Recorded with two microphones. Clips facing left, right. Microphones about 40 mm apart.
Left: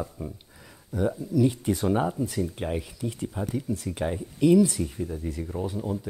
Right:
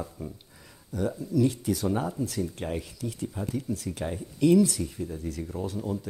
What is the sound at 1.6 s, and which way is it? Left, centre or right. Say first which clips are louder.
Speech: left 3 dB; left.